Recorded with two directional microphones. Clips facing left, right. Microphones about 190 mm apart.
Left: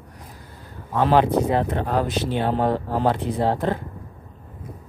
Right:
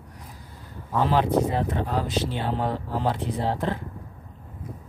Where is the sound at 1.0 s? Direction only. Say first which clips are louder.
Left 4 dB; 70° left (ahead or behind); by 3.8 s 50° left (ahead or behind).